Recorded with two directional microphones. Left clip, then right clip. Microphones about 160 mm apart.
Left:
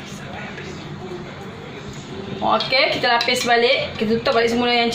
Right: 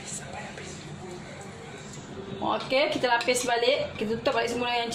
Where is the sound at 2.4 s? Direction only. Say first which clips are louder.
Left 8 dB; 70° right (ahead or behind).